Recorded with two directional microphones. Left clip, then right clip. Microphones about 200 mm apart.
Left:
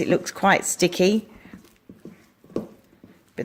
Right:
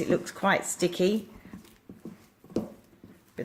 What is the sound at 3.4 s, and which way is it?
Oink, 45° left (ahead or behind).